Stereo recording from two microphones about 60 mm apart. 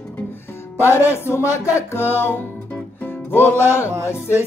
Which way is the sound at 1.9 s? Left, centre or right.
Left.